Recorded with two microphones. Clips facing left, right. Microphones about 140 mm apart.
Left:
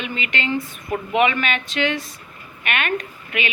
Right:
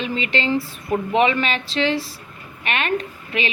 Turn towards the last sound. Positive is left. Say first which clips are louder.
# right 1 dB
turn(degrees=-30)  # may be behind; listen again after turning